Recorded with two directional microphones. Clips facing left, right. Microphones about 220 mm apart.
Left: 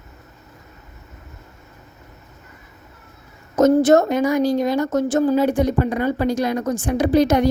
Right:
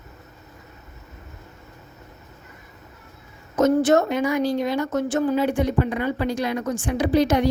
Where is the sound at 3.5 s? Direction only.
40° left (ahead or behind).